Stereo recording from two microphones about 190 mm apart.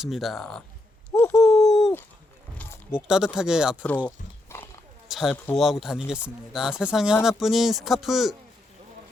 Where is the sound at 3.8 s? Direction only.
10° left (ahead or behind).